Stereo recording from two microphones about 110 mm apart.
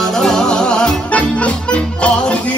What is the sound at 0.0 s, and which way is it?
Music, 5° left (ahead or behind).